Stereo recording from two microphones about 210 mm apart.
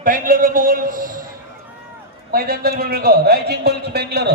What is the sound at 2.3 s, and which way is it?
A man's voice, 45° right (ahead or behind).